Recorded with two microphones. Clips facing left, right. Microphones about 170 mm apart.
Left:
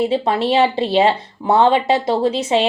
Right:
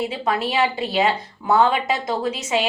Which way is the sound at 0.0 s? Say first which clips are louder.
Left 6 dB; 30° left (ahead or behind).